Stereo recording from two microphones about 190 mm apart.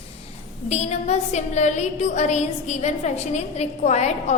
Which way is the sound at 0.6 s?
35° left (ahead or behind).